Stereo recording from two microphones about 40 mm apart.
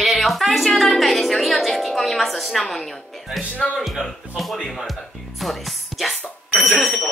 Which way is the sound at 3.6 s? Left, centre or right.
Centre.